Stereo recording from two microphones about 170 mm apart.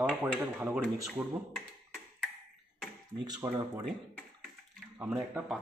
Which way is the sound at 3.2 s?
25° right (ahead or behind).